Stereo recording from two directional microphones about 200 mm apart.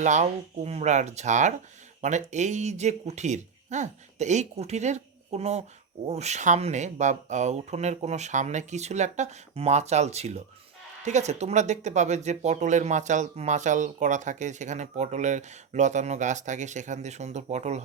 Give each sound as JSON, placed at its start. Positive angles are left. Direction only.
{"t": 0.0, "sound": "speech", "side_deg": -35}